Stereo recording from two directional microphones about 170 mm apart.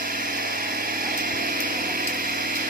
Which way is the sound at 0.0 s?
55° right (ahead or behind).